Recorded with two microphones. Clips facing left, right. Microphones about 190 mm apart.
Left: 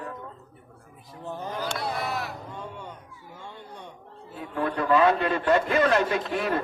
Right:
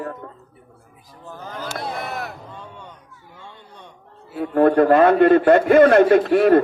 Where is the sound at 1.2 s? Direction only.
25° left (ahead or behind).